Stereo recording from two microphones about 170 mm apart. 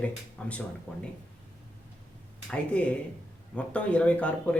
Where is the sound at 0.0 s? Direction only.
5° left (ahead or behind).